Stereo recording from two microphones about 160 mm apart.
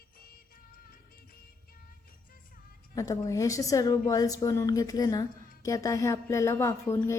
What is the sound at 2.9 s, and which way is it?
A woman's voice, 20° left (ahead or behind).